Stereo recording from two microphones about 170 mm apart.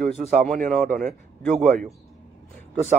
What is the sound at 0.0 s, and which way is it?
Speech, 40° right (ahead or behind).